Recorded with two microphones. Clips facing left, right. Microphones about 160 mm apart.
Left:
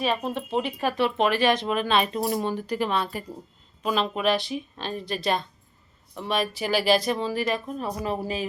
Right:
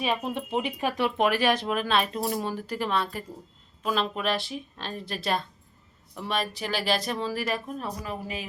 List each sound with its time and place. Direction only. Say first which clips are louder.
0.3 s speech: left 2 dB; 15° right (ahead or behind)
8.0 s speech: left 6 dB; 30° left (ahead or behind)